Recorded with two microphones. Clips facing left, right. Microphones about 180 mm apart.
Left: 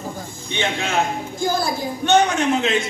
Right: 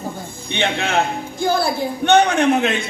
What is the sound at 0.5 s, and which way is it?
A woman's voice, 60° right (ahead or behind).